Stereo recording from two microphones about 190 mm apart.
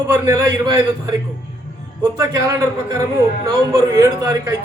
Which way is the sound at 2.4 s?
15° right (ahead or behind).